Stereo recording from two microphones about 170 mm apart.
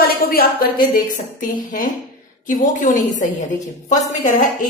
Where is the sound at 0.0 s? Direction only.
60° left (ahead or behind).